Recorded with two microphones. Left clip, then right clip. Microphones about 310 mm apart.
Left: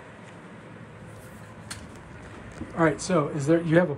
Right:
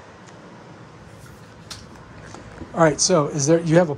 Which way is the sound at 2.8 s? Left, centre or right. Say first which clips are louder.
Right 7 dB; centre.